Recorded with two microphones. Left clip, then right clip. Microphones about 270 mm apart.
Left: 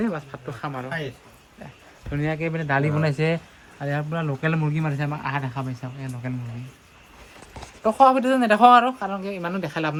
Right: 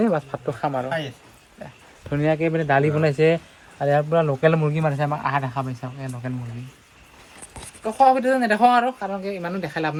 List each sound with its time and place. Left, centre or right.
0.0 s speech: centre
2.0 s speech: centre
7.9 s speech: centre